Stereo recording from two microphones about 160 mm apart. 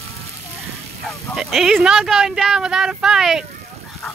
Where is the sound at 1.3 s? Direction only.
Centre (ahead or behind).